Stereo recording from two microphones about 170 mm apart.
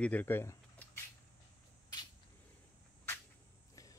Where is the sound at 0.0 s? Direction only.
10° left (ahead or behind).